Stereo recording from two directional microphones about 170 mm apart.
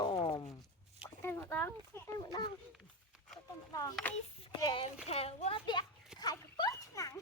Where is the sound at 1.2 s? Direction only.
15° left (ahead or behind).